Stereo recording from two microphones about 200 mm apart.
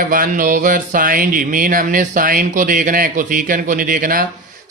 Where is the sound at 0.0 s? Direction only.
45° right (ahead or behind).